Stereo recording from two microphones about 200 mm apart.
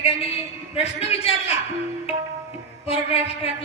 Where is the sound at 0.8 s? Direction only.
30° left (ahead or behind).